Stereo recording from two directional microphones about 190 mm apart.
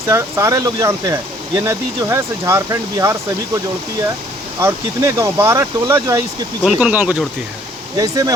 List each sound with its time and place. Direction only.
0.1 s speech: 15° right (ahead or behind)
4.6 s speech: 15° right (ahead or behind)
6.6 s speech: 5° right (ahead or behind)
7.9 s speech: 20° right (ahead or behind)